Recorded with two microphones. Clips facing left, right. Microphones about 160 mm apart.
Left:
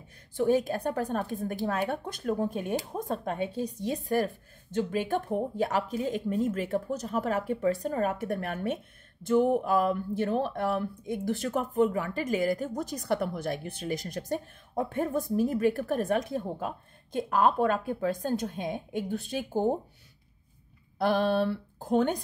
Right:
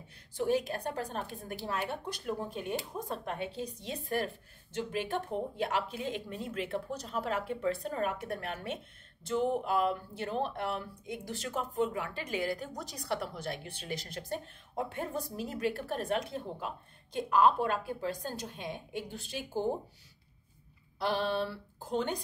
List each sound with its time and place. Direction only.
0.9 s speech: 50° left (ahead or behind)
21.0 s speech: 50° left (ahead or behind)